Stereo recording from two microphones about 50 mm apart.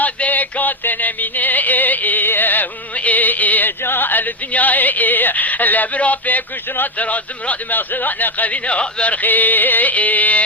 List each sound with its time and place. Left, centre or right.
0.0 s music: left